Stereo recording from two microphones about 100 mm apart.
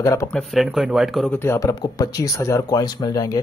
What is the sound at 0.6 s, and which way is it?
Speech, 5° right (ahead or behind).